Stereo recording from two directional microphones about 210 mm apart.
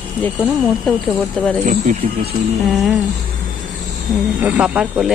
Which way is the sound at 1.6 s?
40° right (ahead or behind).